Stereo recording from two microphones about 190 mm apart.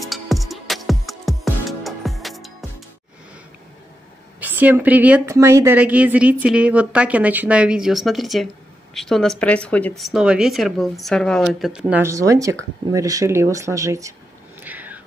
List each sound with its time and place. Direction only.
0.1 s music: centre (ahead or behind)
4.4 s a woman's voice: 10° right (ahead or behind)
14.6 s a sound: 10° right (ahead or behind)